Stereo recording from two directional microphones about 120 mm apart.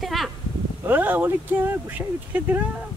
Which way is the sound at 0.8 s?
15° right (ahead or behind).